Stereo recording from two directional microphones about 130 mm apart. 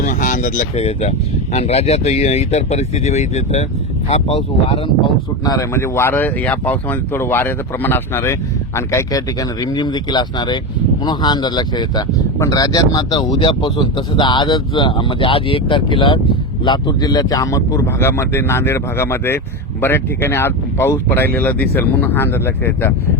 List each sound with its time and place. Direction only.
0.0 s speech: 80° left
0.8 s speech: 55° left (ahead or behind)
4.1 s speech: 50° left (ahead or behind)
5.5 s speech: 20° left (ahead or behind)